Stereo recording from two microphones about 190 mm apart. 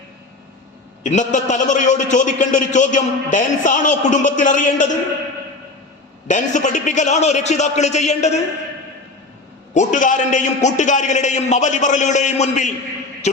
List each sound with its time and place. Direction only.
1.0 s a man's voice: 40° left (ahead or behind)
6.2 s a man's voice: 40° left (ahead or behind)
9.7 s a man's voice: 40° left (ahead or behind)